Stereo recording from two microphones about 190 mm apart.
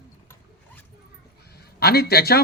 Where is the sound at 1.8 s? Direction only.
55° left (ahead or behind).